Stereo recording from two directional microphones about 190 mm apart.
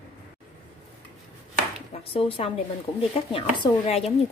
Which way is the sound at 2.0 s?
30° left (ahead or behind).